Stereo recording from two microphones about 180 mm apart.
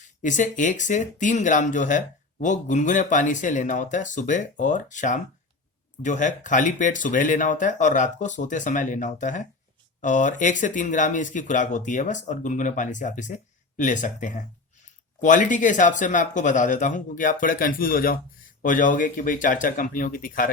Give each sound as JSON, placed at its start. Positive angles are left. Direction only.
{"t": 0.2, "sound": "speech", "side_deg": 45}